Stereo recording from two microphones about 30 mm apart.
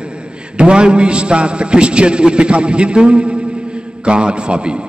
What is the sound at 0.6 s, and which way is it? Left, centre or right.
A man's voice, right.